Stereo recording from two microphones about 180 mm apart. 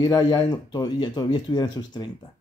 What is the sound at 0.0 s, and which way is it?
Speech, 25° left (ahead or behind).